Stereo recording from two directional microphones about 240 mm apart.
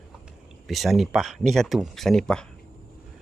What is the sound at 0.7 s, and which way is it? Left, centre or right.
Speech, centre.